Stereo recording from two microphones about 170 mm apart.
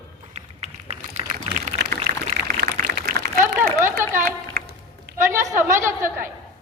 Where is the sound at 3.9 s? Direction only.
50° right (ahead or behind).